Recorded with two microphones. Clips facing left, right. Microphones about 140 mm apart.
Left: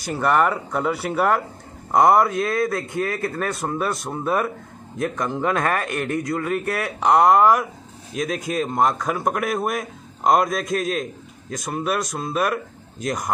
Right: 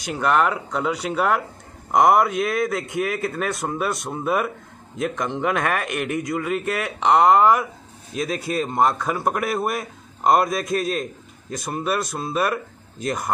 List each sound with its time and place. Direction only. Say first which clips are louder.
0.2 s a man's voice: left 1 dB; centre (ahead or behind)
1.9 s a man's voice: left 1 dB; 15° right (ahead or behind)
5.1 s a man's voice: left 1 dB; centre (ahead or behind)
5.4 s a man's voice: left 1 dB; 10° right (ahead or behind)
7.0 s a man's voice: even; 5° left (ahead or behind)